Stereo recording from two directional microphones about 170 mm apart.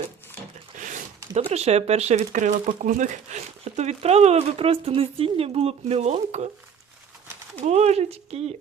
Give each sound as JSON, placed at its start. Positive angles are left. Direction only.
{"t": 0.8, "sound": "a sound", "side_deg": -45}
{"t": 1.3, "sound": "speech", "side_deg": -40}
{"t": 7.6, "sound": "speech", "side_deg": -40}